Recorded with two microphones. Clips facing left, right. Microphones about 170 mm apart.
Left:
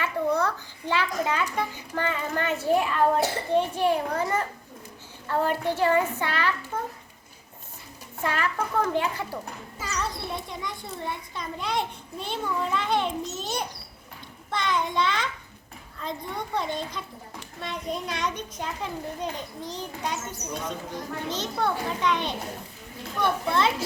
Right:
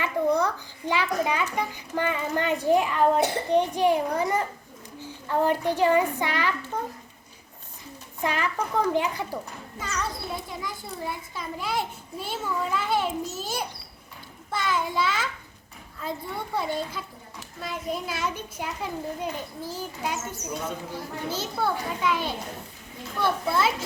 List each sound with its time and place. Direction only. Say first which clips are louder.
0.0 s a child's voice: right 2 dB; 15° right (ahead or behind)
8.2 s a child's voice: even; 15° right (ahead or behind)
9.7 s a child's voice: even; centre (ahead or behind)